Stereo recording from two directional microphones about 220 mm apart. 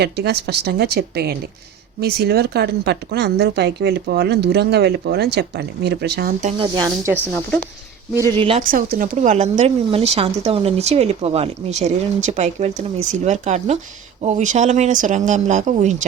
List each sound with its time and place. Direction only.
0.0 s speech: 50° right (ahead or behind)
6.6 s speech: 15° right (ahead or behind)
8.3 s speech: 25° right (ahead or behind)
8.6 s speech: 40° right (ahead or behind)